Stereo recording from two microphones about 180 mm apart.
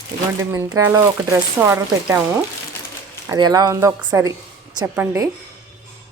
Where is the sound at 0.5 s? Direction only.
15° right (ahead or behind).